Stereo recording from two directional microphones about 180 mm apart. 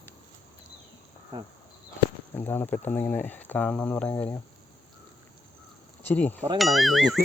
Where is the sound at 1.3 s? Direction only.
20° right (ahead or behind).